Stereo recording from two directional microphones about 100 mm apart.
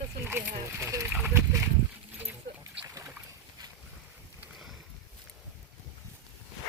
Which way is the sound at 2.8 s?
35° right (ahead or behind).